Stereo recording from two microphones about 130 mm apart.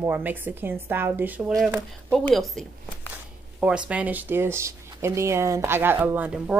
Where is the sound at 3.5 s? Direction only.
10° right (ahead or behind).